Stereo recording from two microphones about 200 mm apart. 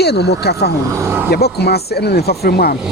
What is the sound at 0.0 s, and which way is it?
Speech, 55° left (ahead or behind).